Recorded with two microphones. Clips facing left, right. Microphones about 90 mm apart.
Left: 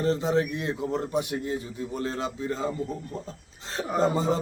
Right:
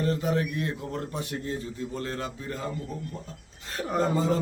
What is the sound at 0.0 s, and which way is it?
Speech, 25° left (ahead or behind).